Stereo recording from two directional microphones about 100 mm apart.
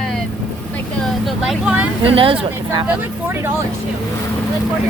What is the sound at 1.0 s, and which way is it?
Vehicle, centre (ahead or behind).